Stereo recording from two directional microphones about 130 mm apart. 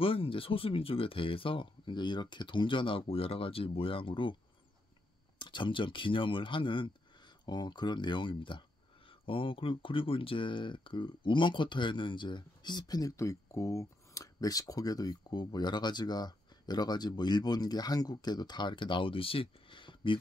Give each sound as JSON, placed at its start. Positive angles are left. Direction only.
{"t": 0.0, "sound": "speech", "side_deg": 45}
{"t": 5.4, "sound": "speech", "side_deg": 40}